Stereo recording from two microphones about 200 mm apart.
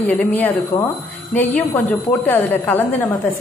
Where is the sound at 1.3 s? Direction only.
10° left (ahead or behind).